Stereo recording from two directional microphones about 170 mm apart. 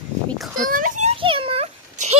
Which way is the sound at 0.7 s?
50° right (ahead or behind).